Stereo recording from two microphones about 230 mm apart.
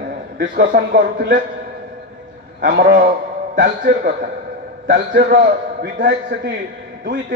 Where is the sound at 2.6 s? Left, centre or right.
Right.